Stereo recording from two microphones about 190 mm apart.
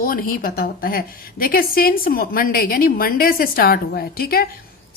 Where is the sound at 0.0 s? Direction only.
50° left (ahead or behind).